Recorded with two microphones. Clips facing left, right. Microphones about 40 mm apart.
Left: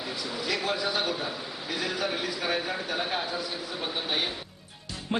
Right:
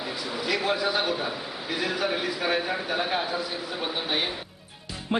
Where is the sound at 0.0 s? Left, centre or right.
Centre.